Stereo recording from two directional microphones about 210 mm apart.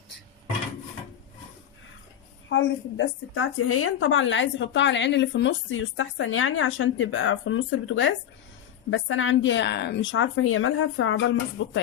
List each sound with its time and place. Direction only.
2.5 s a woman's voice: 60° left (ahead or behind)